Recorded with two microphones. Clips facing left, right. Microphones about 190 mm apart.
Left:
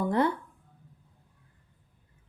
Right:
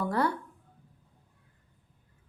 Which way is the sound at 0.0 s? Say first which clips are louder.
Left 3 dB; 20° left (ahead or behind).